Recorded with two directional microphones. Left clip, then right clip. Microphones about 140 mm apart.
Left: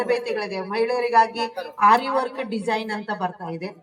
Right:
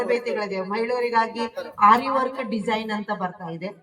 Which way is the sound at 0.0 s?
30° left (ahead or behind).